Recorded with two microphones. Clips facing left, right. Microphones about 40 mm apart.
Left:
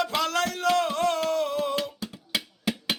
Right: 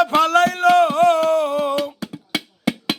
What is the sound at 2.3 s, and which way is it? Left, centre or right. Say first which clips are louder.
Music: right 6 dB; right.